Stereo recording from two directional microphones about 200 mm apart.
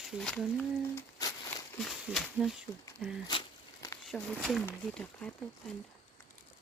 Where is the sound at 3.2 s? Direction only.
25° left (ahead or behind).